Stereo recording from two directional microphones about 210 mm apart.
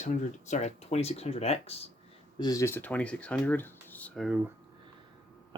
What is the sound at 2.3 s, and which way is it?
Speech, 15° left (ahead or behind).